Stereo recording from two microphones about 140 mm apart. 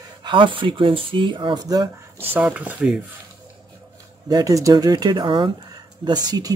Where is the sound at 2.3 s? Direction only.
10° right (ahead or behind).